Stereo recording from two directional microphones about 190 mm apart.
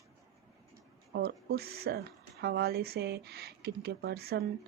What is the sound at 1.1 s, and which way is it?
Speech, 55° right (ahead or behind).